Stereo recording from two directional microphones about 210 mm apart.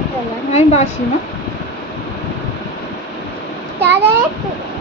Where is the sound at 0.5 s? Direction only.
30° left (ahead or behind).